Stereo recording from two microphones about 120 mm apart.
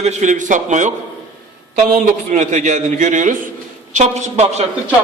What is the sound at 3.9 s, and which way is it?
Speech, 80° right.